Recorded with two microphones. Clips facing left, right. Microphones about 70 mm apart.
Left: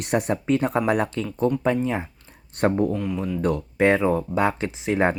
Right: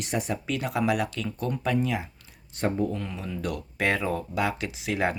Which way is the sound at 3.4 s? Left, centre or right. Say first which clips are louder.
Left 8 dB; left.